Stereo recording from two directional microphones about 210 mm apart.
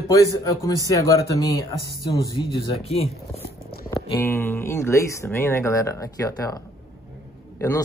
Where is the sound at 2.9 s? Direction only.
30° left (ahead or behind).